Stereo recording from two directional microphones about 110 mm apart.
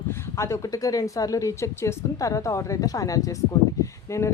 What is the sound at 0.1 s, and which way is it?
Speech, 25° left (ahead or behind).